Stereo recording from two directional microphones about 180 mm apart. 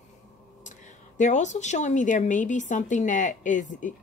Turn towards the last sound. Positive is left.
turn(degrees=45)  # may be behind; listen again after turning